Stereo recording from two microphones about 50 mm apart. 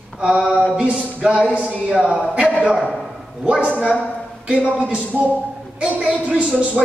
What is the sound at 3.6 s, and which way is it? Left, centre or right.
Speech, right.